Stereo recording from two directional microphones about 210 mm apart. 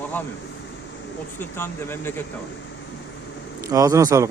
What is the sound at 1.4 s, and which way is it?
Speech, 10° left (ahead or behind).